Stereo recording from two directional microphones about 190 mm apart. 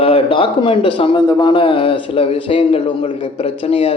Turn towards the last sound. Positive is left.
turn(degrees=30)  # may be behind; listen again after turning